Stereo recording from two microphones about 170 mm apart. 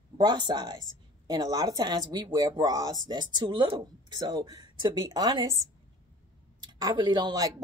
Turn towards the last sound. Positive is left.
turn(degrees=-25)  # may be behind; listen again after turning